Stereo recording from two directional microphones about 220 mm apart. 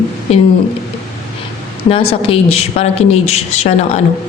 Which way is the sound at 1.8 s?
25° left (ahead or behind).